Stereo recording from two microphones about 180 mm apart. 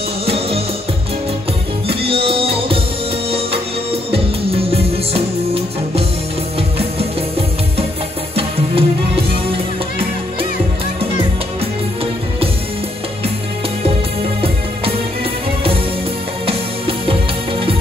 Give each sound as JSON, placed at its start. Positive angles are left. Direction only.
{"t": 1.9, "sound": "music", "side_deg": -30}
{"t": 4.1, "sound": "music", "side_deg": -30}
{"t": 8.4, "sound": "music", "side_deg": -30}